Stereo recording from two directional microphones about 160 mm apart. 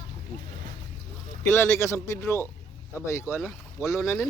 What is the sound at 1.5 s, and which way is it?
A man's voice, 15° left (ahead or behind).